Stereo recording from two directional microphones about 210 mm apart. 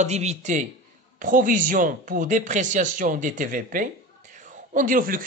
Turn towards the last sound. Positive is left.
turn(degrees=-40)  # may be behind; listen again after turning